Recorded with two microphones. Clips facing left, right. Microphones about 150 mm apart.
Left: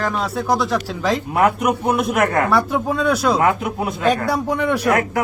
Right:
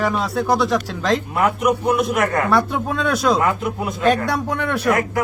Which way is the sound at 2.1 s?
50° left (ahead or behind).